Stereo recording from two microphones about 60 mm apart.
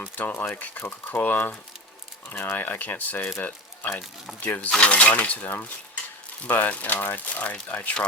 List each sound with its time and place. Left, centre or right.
0.2 s speech: left
4.4 s speech: left
5.5 s cutlery: left
6.5 s speech: left